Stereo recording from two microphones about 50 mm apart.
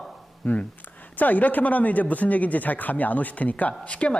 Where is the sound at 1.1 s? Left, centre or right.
Left.